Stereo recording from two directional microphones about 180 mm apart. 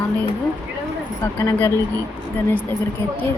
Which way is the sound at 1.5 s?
10° left (ahead or behind).